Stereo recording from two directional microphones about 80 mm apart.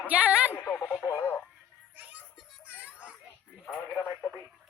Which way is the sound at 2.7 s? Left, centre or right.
Centre.